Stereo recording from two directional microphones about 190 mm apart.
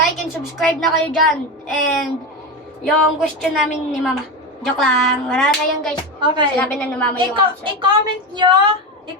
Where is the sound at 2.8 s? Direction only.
Centre (ahead or behind).